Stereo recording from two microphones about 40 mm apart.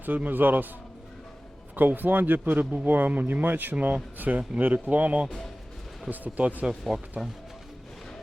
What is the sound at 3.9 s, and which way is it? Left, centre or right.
Speech, right.